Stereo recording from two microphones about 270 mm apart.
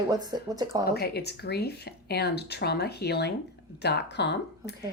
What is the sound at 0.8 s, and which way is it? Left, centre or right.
A woman's voice, left.